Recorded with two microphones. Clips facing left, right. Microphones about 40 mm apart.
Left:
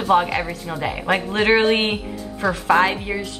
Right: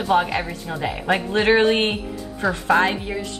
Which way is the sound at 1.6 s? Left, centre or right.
Centre.